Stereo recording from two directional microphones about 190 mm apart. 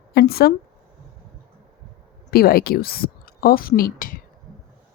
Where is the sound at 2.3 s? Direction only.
55° left (ahead or behind).